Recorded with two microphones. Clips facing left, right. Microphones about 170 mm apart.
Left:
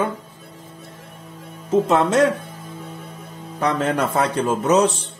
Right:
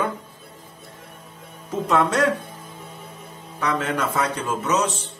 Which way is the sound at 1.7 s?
25° left (ahead or behind).